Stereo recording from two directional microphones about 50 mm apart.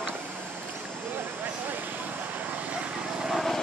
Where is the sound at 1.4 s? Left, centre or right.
Right.